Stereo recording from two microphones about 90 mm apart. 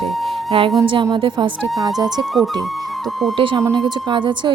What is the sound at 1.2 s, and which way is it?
Speech, 70° right (ahead or behind).